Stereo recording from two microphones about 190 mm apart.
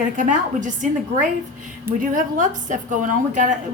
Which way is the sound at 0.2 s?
40° right (ahead or behind).